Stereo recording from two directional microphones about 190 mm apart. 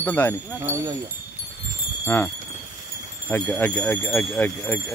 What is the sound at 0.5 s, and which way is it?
Speech, 15° right (ahead or behind).